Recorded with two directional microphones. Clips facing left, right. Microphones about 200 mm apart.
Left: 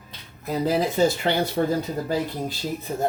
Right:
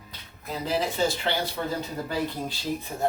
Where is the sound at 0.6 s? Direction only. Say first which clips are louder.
Left 5 dB; 45° left (ahead or behind).